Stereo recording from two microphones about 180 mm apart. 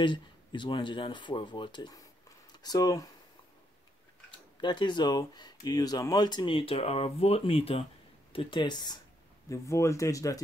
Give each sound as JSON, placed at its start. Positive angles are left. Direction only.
{"t": 0.0, "sound": "speech", "side_deg": 25}
{"t": 4.6, "sound": "speech", "side_deg": 25}